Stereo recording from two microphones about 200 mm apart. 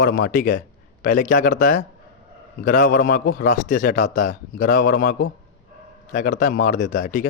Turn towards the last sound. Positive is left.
turn(degrees=40)  # may be behind; listen again after turning